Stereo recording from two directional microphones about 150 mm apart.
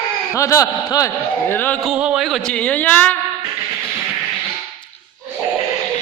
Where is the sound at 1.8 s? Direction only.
5° right (ahead or behind); by 3.1 s 10° left (ahead or behind).